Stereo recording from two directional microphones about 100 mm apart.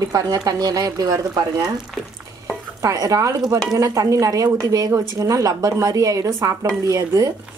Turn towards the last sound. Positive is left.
turn(degrees=-35)  # may be behind; listen again after turning